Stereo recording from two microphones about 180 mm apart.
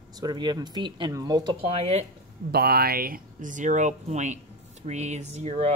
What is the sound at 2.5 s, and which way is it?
Speech, 60° right (ahead or behind).